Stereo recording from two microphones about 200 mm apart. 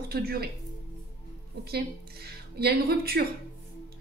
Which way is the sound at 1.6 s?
50° right (ahead or behind).